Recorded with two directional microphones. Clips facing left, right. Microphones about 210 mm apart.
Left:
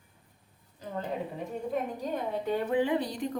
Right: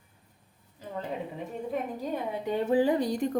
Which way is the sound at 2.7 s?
40° right (ahead or behind).